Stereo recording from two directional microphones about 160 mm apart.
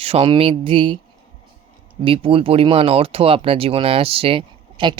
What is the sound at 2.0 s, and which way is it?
Speech, 35° right (ahead or behind).